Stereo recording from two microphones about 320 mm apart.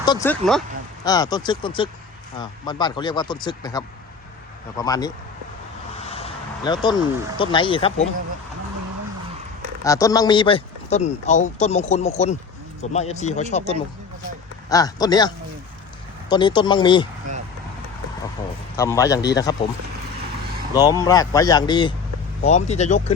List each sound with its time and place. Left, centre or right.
0.0 s speech: centre
9.8 s speech: centre
16.3 s speech: centre
18.8 s speech: centre
21.0 s speech: centre